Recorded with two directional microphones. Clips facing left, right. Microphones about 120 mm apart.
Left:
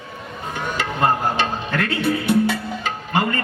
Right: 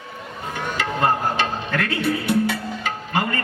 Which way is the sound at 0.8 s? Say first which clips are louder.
Left 1 dB; 25° left (ahead or behind).